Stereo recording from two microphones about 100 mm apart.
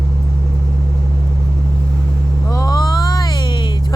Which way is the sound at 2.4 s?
35° left (ahead or behind).